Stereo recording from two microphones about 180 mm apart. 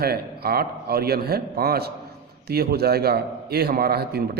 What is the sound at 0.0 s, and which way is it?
A man's voice, 60° right (ahead or behind).